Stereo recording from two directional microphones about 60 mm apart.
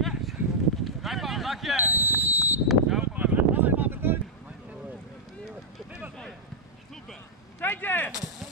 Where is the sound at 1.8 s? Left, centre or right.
Right.